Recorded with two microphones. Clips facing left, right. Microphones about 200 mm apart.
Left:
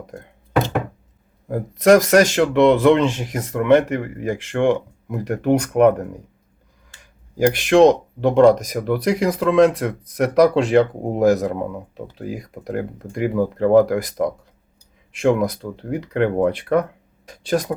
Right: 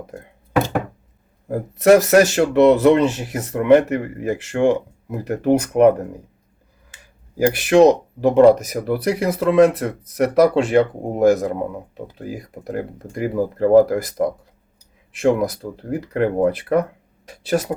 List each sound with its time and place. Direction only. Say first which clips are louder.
1.5 s speech: right 1 dB; 5° right (ahead or behind)
7.3 s speech: even; 5° right (ahead or behind)